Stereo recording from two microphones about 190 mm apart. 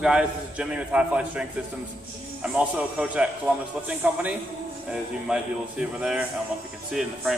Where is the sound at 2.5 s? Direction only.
5° right (ahead or behind).